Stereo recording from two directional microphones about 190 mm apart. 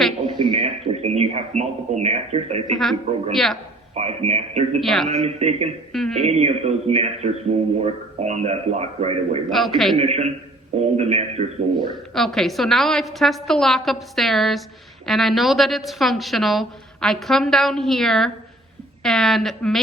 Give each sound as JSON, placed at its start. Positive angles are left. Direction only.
{"t": 0.3, "sound": "speech", "side_deg": -25}
{"t": 3.3, "sound": "a woman's voice", "side_deg": 0}
{"t": 3.9, "sound": "speech", "side_deg": -35}
{"t": 4.8, "sound": "a woman's voice", "side_deg": 0}
{"t": 5.0, "sound": "speech", "side_deg": -35}
{"t": 5.9, "sound": "a sound", "side_deg": 0}
{"t": 6.2, "sound": "speech", "side_deg": -35}
{"t": 9.5, "sound": "a woman's voice", "side_deg": 0}
{"t": 10.0, "sound": "speech", "side_deg": -35}
{"t": 12.1, "sound": "a woman's voice", "side_deg": 0}